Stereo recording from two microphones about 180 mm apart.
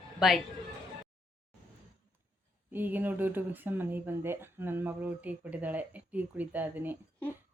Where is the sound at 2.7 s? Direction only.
10° right (ahead or behind).